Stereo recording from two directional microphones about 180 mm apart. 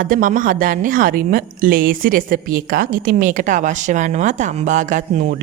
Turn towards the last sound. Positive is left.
turn(degrees=-45)  # may be behind; listen again after turning